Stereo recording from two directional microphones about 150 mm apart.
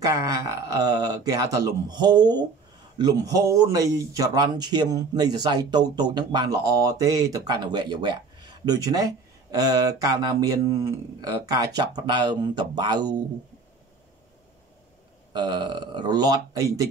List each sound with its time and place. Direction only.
0.0 s a man's voice: 20° right (ahead or behind)
15.3 s a man's voice: 30° right (ahead or behind)